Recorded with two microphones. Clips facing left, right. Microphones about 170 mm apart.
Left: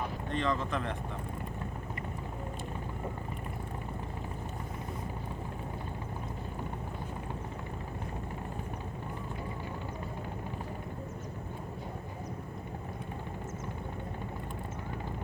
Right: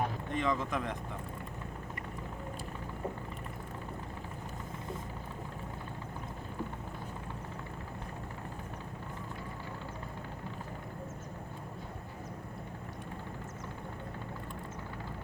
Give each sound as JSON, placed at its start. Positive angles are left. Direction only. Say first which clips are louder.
{"t": 0.3, "sound": "speech", "louder": "left 3 dB", "side_deg": -10}